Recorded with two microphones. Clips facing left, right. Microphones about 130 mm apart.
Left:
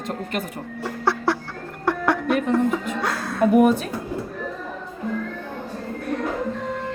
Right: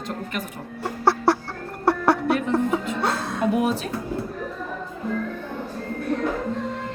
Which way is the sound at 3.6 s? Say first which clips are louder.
Left 10 dB; 50° left (ahead or behind).